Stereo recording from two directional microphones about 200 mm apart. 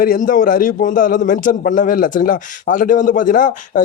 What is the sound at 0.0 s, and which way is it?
A man's voice, 45° left (ahead or behind).